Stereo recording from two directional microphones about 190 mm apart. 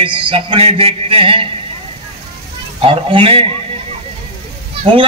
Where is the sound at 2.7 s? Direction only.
30° right (ahead or behind).